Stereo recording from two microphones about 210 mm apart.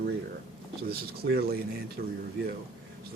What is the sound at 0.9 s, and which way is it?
Speech, 45° right (ahead or behind).